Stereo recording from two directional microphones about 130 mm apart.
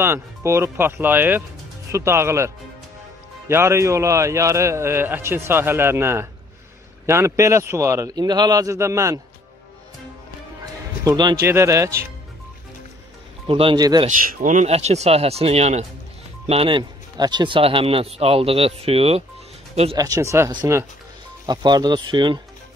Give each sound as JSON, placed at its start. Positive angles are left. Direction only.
{"t": 0.0, "sound": "a man's voice", "side_deg": -20}
{"t": 11.1, "sound": "speech", "side_deg": -30}
{"t": 11.4, "sound": "a man's voice", "side_deg": -20}
{"t": 13.5, "sound": "speech", "side_deg": -45}
{"t": 13.7, "sound": "a man's voice", "side_deg": -30}
{"t": 14.0, "sound": "speech", "side_deg": -80}
{"t": 14.7, "sound": "speech", "side_deg": -60}
{"t": 16.4, "sound": "speech", "side_deg": -45}
{"t": 20.0, "sound": "a man's voice", "side_deg": -25}
{"t": 21.5, "sound": "speech", "side_deg": -35}